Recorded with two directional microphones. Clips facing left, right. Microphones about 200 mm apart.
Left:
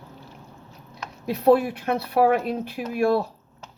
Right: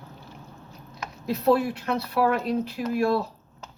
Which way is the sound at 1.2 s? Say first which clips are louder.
Left 3 dB; 55° left (ahead or behind).